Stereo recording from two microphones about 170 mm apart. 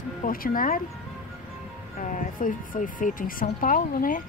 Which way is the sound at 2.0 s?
50° left (ahead or behind).